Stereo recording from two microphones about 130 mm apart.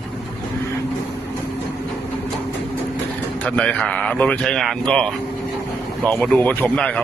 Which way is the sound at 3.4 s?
10° left (ahead or behind).